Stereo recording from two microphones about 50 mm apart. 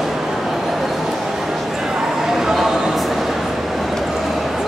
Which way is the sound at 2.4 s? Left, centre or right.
Centre.